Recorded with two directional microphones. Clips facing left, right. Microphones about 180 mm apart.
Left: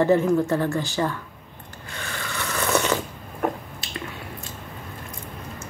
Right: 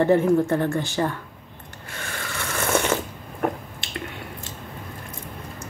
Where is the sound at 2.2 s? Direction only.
45° right (ahead or behind).